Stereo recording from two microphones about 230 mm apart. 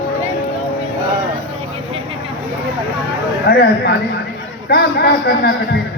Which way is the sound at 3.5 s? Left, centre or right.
Left.